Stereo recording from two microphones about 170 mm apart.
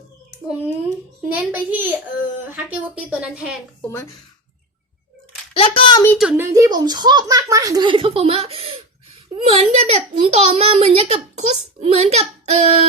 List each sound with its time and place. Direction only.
0.4 s a woman's voice: 10° right (ahead or behind)
3.8 s speech: 15° left (ahead or behind)
5.5 s a woman's voice: 30° left (ahead or behind)
6.1 s a woman's voice: 10° right (ahead or behind); by 12.8 s 40° right (ahead or behind)